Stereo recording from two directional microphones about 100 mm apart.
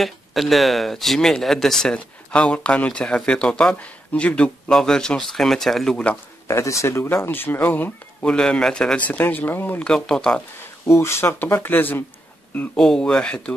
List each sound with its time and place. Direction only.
0.0 s speech: centre (ahead or behind)
6.4 s speech: 30° left (ahead or behind)
8.4 s speech: 5° left (ahead or behind)
9.8 s speech: 5° left (ahead or behind)
10.9 s speech: 25° left (ahead or behind)
12.5 s speech: 5° left (ahead or behind)